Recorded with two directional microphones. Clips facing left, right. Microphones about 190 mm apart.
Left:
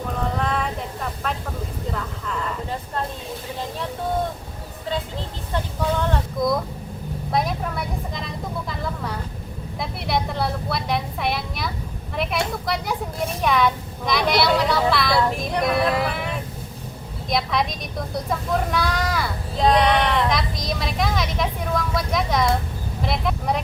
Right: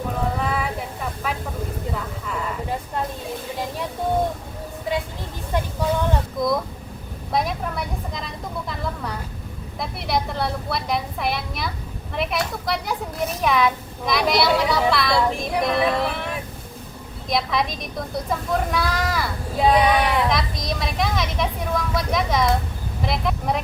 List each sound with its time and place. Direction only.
0.3 s a sound: 5° right (ahead or behind)
1.9 s speech: 5° right (ahead or behind)
6.4 s a woman's voice: centre (ahead or behind)